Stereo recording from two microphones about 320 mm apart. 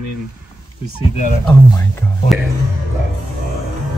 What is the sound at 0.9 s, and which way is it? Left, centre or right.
Speech, left.